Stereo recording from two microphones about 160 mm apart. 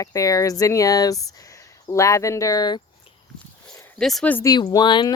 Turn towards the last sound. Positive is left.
turn(degrees=30)  # may be behind; listen again after turning